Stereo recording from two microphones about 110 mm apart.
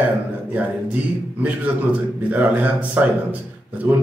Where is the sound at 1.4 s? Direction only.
15° right (ahead or behind).